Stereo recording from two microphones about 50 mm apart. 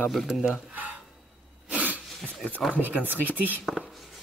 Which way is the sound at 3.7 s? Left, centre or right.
Centre.